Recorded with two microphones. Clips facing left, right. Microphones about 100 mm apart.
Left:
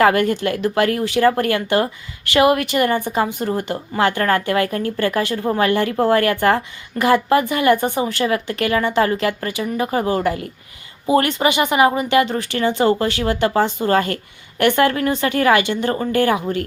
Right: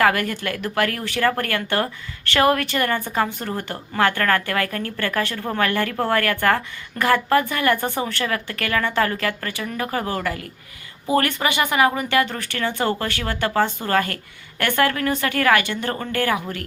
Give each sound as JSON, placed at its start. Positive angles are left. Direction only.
{"t": 0.0, "sound": "speech", "side_deg": 25}